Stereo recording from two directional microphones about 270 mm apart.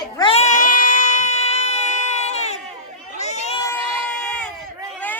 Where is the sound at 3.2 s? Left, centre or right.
Left.